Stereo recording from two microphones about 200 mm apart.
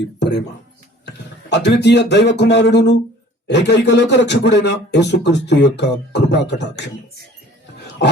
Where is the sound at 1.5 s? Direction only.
60° left (ahead or behind).